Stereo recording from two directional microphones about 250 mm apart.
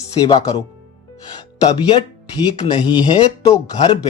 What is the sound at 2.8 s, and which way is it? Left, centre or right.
Speech, centre.